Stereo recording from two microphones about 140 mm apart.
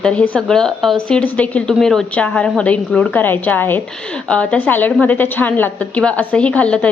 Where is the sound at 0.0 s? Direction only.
5° left (ahead or behind).